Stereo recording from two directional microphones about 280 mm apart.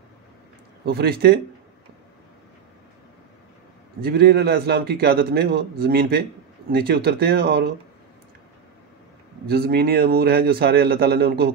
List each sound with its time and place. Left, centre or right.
0.8 s a man's voice: right
4.0 s a man's voice: right
9.5 s a man's voice: right